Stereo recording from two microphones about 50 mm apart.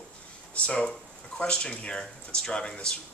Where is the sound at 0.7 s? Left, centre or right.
Left.